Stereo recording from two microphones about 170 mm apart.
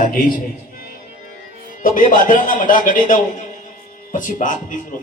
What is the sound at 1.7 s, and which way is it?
Speech, 50° left (ahead or behind).